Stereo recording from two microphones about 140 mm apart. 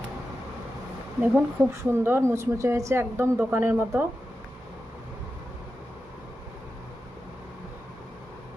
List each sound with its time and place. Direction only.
1.4 s speech: 15° right (ahead or behind)